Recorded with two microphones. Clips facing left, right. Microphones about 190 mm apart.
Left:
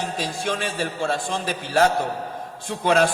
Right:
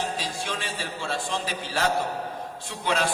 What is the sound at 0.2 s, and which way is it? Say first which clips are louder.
A man's voice: left 6 dB; 50° left (ahead or behind).